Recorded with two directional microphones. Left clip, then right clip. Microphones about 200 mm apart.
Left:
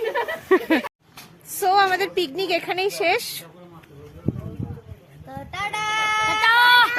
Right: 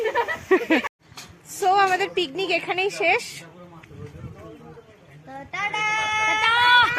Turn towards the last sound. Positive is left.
turn(degrees=25)  # may be behind; listen again after turning